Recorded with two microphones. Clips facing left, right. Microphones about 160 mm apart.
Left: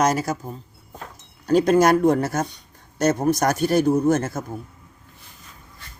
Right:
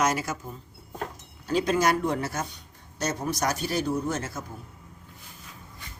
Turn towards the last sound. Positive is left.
turn(degrees=50)  # may be behind; listen again after turning